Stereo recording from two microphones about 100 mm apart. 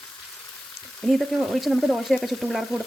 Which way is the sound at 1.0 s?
Centre (ahead or behind).